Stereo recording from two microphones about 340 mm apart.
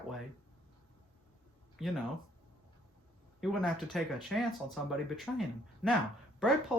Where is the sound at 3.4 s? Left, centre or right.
Centre.